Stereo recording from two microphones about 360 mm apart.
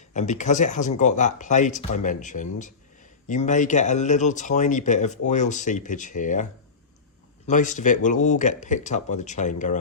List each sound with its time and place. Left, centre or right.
0.1 s speech: centre